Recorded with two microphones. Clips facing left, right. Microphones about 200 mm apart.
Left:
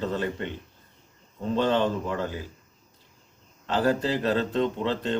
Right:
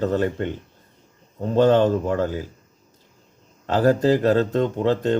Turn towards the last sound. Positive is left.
turn(degrees=-45)  # may be behind; listen again after turning